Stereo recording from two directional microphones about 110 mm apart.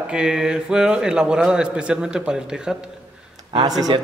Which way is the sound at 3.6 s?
35° right (ahead or behind).